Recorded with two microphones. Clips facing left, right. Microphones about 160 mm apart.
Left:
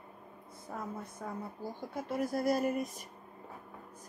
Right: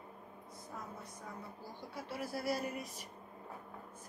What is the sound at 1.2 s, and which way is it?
Speech, 55° left (ahead or behind).